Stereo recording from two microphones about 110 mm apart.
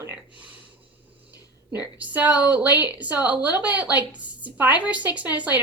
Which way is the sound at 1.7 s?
15° right (ahead or behind).